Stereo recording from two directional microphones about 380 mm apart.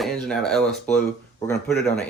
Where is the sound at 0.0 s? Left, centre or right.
Centre.